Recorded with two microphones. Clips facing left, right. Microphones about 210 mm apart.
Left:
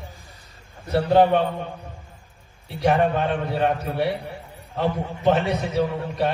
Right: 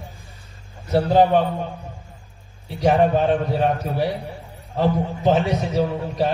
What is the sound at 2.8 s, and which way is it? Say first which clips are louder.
A man's voice: right 3 dB; 60° left (ahead or behind).